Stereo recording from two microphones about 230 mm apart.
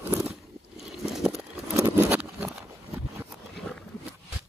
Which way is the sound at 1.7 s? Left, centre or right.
Centre.